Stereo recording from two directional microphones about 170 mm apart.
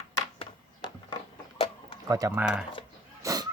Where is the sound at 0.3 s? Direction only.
25° left (ahead or behind).